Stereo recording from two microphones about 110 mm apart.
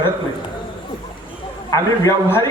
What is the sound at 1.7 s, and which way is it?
Speech, 30° left (ahead or behind).